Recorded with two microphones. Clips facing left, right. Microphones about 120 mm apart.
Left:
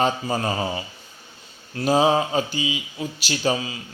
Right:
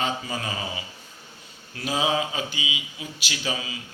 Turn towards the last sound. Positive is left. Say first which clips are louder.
# left 7 dB
turn(degrees=40)  # may be behind; listen again after turning